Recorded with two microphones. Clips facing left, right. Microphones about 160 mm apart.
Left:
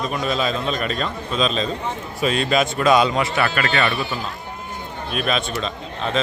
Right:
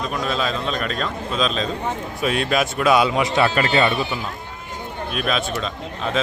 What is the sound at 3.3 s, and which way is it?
Speech, 25° right (ahead or behind).